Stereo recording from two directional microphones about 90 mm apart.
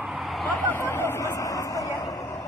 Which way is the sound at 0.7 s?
30° left (ahead or behind).